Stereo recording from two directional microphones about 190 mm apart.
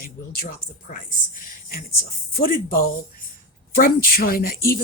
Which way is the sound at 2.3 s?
50° left (ahead or behind).